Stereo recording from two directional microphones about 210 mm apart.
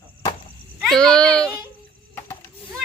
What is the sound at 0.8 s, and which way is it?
Speech, centre (ahead or behind).